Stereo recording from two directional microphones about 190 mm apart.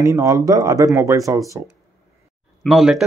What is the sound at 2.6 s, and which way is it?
Speech, centre (ahead or behind).